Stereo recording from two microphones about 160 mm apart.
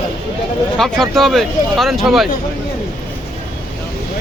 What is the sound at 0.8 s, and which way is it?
Speech, centre (ahead or behind).